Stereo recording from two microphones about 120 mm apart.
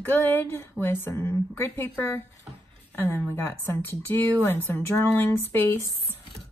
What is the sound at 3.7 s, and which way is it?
A woman's voice, 15° left (ahead or behind).